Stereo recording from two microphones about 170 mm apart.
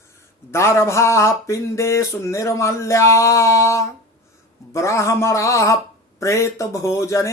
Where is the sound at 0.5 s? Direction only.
15° left (ahead or behind).